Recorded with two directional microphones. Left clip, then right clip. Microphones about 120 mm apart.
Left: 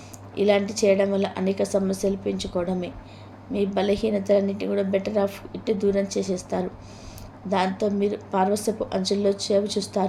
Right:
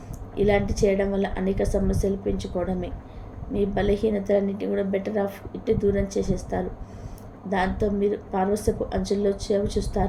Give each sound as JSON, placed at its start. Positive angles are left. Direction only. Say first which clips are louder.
{"t": 0.3, "sound": "a woman's voice", "louder": "left 1 dB", "side_deg": 25}